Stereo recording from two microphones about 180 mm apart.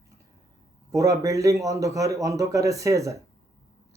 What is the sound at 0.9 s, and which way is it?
Speech, 15° right (ahead or behind).